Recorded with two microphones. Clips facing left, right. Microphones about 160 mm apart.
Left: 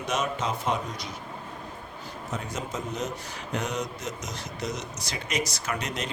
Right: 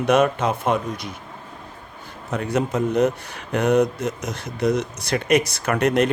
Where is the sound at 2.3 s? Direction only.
65° right (ahead or behind).